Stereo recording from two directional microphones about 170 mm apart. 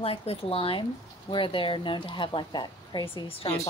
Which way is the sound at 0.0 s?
35° left (ahead or behind).